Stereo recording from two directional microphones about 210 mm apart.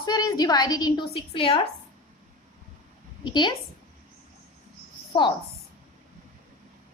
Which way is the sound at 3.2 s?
20° left (ahead or behind).